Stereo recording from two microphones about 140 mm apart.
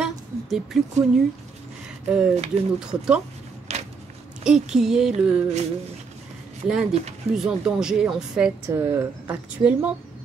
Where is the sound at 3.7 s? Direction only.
50° right (ahead or behind).